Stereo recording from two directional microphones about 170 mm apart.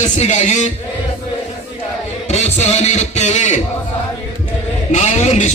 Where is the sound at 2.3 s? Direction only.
40° left (ahead or behind).